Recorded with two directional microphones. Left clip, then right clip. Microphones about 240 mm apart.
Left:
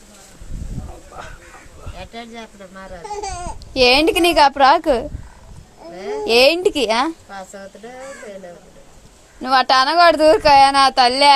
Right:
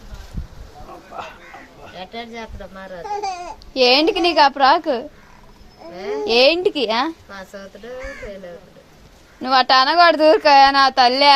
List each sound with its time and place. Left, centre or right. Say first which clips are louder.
2.0 s speech: right 2 dB; right
3.1 s speech: right 2 dB; centre
6.2 s speech: left 1 dB; centre
7.3 s a woman's voice: left 2 dB; centre
9.4 s a woman's voice: even; centre